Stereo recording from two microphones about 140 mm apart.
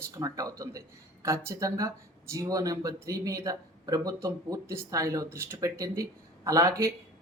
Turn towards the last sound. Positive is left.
turn(degrees=-20)  # may be behind; listen again after turning